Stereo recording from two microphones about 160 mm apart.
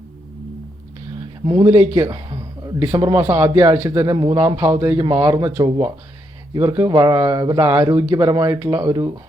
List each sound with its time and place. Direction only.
1.5 s speech: 35° right (ahead or behind)
1.7 s a man's voice: 15° right (ahead or behind)
2.1 s a sound: 30° right (ahead or behind)
2.7 s a man's voice: 15° right (ahead or behind)
4.5 s a man's voice: 15° right (ahead or behind)